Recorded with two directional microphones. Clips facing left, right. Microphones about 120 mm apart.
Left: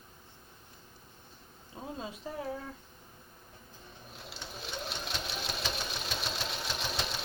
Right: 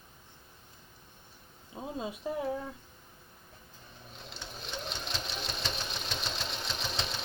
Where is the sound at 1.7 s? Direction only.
15° right (ahead or behind).